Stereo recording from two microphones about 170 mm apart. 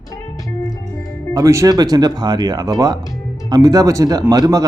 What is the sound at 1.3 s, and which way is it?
Speech, 20° right (ahead or behind).